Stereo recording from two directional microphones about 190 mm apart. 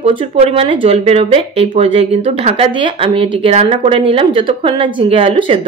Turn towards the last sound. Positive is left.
turn(degrees=-30)  # may be behind; listen again after turning